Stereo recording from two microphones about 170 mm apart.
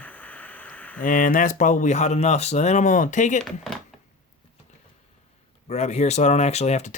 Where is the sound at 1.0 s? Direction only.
55° left (ahead or behind).